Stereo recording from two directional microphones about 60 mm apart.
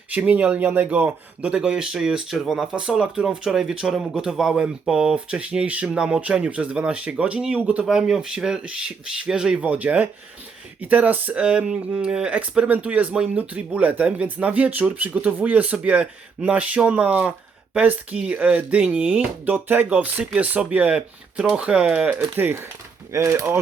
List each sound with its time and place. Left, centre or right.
0.1 s speech: right
0.6 s speech: right
7.9 s speech: centre
9.6 s speech: right
19.5 s speech: right
22.1 s speech: right
23.1 s speech: right